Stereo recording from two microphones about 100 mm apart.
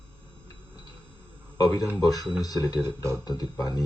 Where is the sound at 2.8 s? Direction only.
30° right (ahead or behind).